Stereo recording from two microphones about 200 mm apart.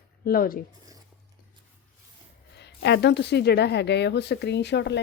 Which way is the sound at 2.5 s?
60° left (ahead or behind).